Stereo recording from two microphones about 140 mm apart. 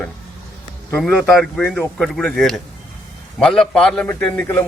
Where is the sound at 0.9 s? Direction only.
10° left (ahead or behind).